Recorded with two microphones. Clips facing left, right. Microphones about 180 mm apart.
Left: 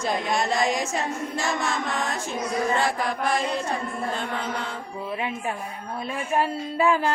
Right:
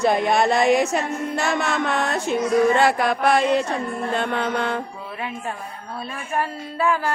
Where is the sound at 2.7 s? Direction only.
70° right (ahead or behind).